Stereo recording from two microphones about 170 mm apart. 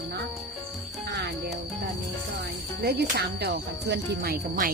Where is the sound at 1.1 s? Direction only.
75° right (ahead or behind).